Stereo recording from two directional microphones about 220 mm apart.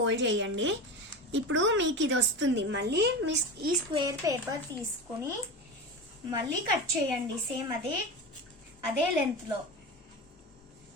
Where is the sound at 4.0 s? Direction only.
15° right (ahead or behind).